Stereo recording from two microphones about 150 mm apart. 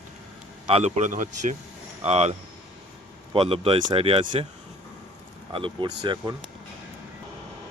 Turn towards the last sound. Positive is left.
turn(degrees=-30)  # may be behind; listen again after turning